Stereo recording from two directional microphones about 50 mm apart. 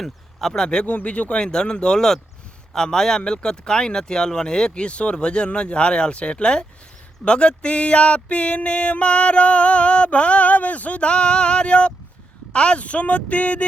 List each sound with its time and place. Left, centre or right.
0.0 s speech: centre
0.9 s speech: left; by 2.2 s centre
2.7 s a sound: centre